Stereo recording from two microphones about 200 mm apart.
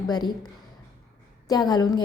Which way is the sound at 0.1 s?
20° left (ahead or behind).